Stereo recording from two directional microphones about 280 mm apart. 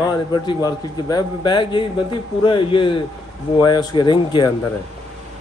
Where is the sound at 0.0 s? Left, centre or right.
Centre.